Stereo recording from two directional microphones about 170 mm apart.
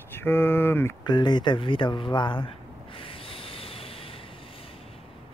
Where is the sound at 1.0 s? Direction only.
25° left (ahead or behind).